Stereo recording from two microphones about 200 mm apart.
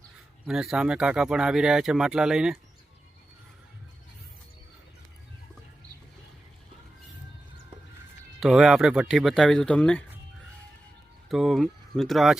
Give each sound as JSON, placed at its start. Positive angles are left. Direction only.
{"t": 0.4, "sound": "speech", "side_deg": 0}
{"t": 8.4, "sound": "speech", "side_deg": 0}
{"t": 11.3, "sound": "speech", "side_deg": 0}